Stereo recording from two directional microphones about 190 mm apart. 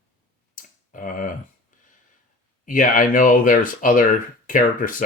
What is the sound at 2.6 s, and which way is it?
Speech, 45° left (ahead or behind).